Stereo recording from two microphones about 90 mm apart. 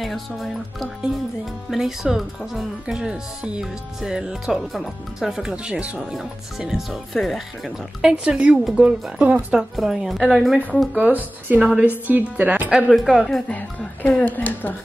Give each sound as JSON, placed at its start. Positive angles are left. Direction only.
{"t": 0.0, "sound": "speech", "side_deg": 0}
{"t": 9.8, "sound": "speech", "side_deg": 0}
{"t": 11.0, "sound": "speech", "side_deg": -20}
{"t": 13.1, "sound": "speech", "side_deg": -5}
{"t": 13.5, "sound": "speech", "side_deg": 15}